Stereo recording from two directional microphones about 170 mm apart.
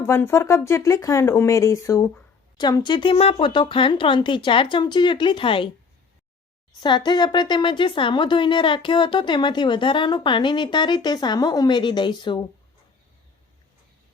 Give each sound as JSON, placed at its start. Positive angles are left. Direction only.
{"t": 0.0, "sound": "speech", "side_deg": 15}
{"t": 6.8, "sound": "speech", "side_deg": 25}